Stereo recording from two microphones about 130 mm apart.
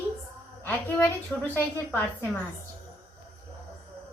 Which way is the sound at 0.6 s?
15° left (ahead or behind).